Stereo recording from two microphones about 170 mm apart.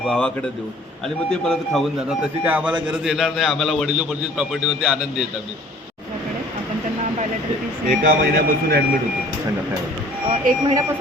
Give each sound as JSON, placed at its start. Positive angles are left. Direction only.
{"t": 0.0, "sound": "a man's voice", "side_deg": 5}
{"t": 2.4, "sound": "a man's voice", "side_deg": -10}
{"t": 7.9, "sound": "speech", "side_deg": -55}
{"t": 10.2, "sound": "speech", "side_deg": -30}